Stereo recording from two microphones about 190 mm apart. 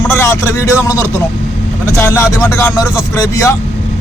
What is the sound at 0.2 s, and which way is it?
A man's voice, 15° left (ahead or behind).